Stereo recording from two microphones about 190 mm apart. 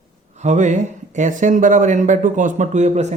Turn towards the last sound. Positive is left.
turn(degrees=-35)  # may be behind; listen again after turning